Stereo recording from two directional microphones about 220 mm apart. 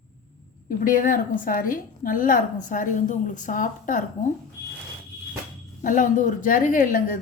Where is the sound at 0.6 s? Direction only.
40° left (ahead or behind).